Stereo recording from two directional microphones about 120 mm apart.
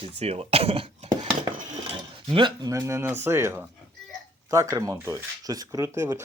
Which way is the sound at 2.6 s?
25° right (ahead or behind).